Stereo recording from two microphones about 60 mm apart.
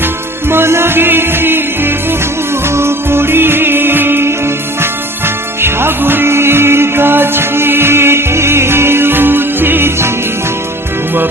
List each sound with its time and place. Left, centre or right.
0.4 s music: right